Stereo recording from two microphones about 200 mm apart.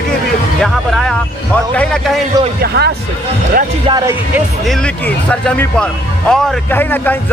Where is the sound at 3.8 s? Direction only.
20° right (ahead or behind).